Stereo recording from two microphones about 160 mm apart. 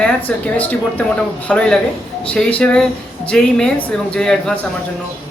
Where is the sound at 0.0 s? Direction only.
10° left (ahead or behind).